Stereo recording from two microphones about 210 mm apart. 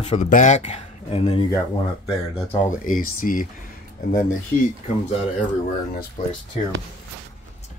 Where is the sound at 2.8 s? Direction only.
40° left (ahead or behind).